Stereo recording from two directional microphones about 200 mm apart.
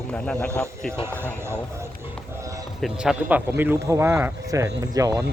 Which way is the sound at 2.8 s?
5° right (ahead or behind).